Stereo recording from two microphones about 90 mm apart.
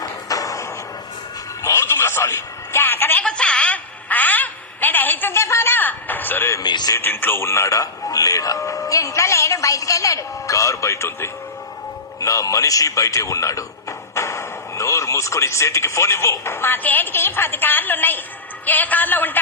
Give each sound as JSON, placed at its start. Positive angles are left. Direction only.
{"t": 0.3, "sound": "music", "side_deg": 40}
{"t": 3.2, "sound": "a sound", "side_deg": 10}
{"t": 6.6, "sound": "speech", "side_deg": 50}
{"t": 6.9, "sound": "a man's voice", "side_deg": 25}